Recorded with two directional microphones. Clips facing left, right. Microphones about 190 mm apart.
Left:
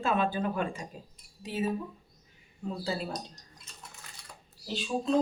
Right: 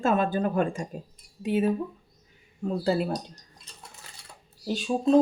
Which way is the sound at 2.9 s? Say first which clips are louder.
Right 9 dB; 55° right (ahead or behind).